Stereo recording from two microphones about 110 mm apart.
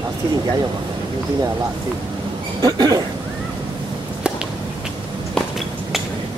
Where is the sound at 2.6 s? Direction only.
35° right (ahead or behind).